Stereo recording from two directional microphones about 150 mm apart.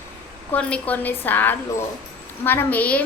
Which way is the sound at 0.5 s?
10° left (ahead or behind).